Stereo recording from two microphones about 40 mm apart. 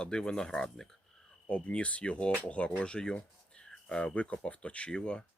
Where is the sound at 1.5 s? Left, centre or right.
Left.